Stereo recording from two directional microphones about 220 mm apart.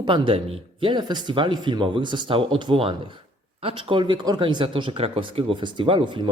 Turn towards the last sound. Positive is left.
turn(degrees=-20)  # may be behind; listen again after turning